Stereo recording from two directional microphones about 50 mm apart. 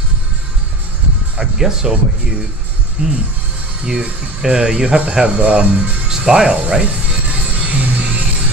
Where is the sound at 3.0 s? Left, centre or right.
Centre.